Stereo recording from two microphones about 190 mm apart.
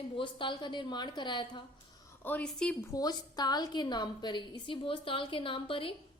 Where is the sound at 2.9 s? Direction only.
20° left (ahead or behind).